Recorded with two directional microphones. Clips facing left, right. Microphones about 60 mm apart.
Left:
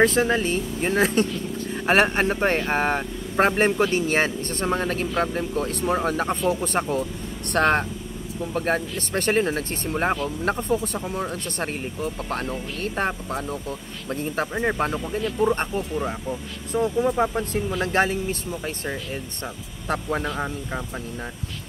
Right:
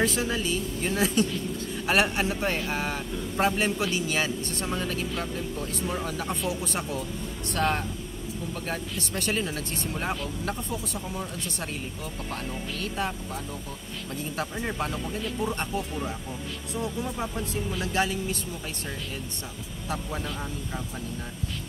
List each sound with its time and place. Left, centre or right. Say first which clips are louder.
0.0 s speech: left 7 dB; left
7.4 s speech: left 7 dB; left